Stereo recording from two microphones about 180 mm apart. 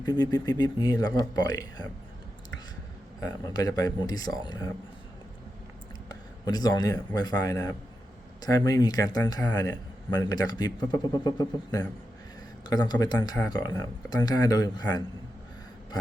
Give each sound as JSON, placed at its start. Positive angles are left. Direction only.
{"t": 0.0, "sound": "a man's voice", "side_deg": 20}
{"t": 3.2, "sound": "a man's voice", "side_deg": 20}
{"t": 6.1, "sound": "a man's voice", "side_deg": 20}